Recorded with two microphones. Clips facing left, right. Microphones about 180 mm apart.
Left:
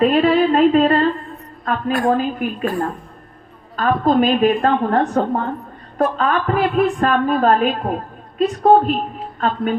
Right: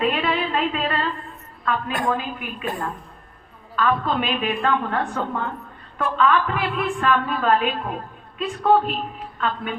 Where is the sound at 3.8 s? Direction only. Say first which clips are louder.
Left 6 dB; 40° left (ahead or behind).